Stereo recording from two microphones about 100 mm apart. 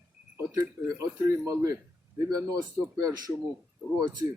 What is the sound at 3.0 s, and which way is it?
Speech, 40° right (ahead or behind).